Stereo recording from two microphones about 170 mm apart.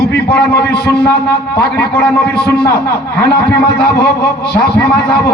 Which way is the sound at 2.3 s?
70° left (ahead or behind).